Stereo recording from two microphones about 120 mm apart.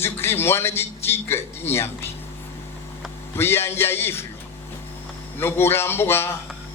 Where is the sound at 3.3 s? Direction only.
20° left (ahead or behind).